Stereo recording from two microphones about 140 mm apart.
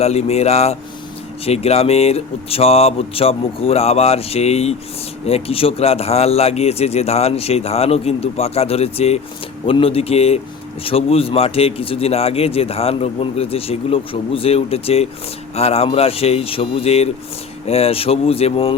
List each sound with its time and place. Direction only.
0.0 s speech: 50° left (ahead or behind)